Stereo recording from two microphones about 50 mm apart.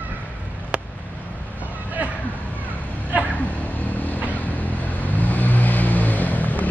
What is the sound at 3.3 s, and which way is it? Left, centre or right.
Vehicle, left.